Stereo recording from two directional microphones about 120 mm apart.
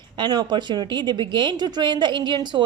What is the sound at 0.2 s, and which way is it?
A woman's voice, 35° right (ahead or behind).